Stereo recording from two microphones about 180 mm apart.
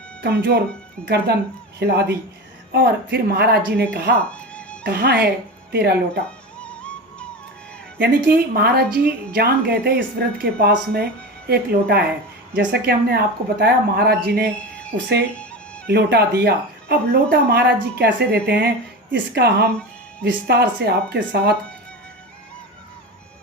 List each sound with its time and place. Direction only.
0.2 s a woman's voice: 65° right (ahead or behind)
4.2 s music: 5° left (ahead or behind)
4.9 s a woman's voice: 60° right (ahead or behind)
6.6 s music: 5° left (ahead or behind)
7.9 s a woman's voice: 60° right (ahead or behind)
15.9 s a woman's voice: 65° right (ahead or behind)